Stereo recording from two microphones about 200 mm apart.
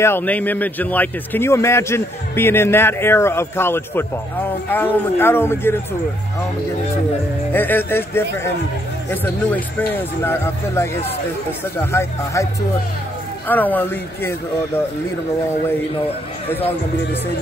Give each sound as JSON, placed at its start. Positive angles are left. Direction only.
{"t": 0.0, "sound": "a man's voice", "side_deg": 10}
{"t": 7.5, "sound": "a man's voice", "side_deg": 10}
{"t": 13.5, "sound": "a man's voice", "side_deg": 10}
{"t": 16.4, "sound": "a man's voice", "side_deg": 10}